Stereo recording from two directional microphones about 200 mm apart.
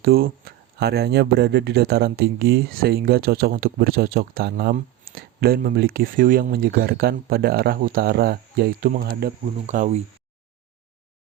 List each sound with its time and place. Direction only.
0.0 s speech: 50° right (ahead or behind)